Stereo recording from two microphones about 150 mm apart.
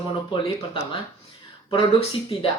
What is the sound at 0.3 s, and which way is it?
Speech, 35° left (ahead or behind).